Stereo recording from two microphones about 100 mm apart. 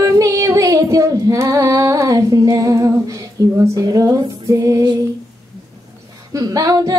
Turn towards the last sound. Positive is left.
turn(degrees=-40)  # may be behind; listen again after turning